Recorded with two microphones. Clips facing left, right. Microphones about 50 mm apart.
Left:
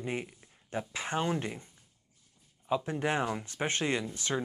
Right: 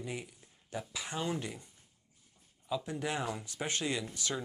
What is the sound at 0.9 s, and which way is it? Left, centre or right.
Speech, left.